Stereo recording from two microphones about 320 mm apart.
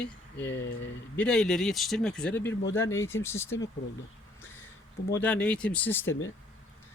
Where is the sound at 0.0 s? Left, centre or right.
Centre.